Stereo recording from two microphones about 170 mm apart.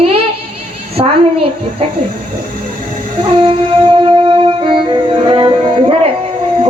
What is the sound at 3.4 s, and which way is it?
Music, 30° right (ahead or behind).